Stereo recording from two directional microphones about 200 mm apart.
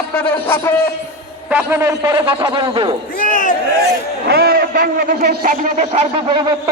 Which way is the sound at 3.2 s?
40° left (ahead or behind).